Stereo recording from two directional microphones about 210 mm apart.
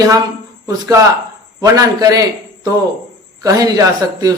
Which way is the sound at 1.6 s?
15° right (ahead or behind).